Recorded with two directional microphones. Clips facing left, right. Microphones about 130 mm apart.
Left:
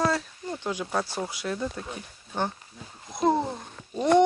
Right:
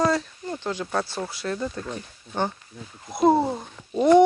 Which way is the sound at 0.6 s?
10° left (ahead or behind).